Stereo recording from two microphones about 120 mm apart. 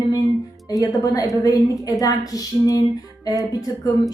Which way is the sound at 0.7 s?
30° left (ahead or behind).